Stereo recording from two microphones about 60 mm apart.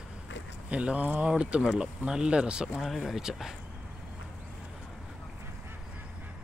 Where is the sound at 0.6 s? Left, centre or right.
Right.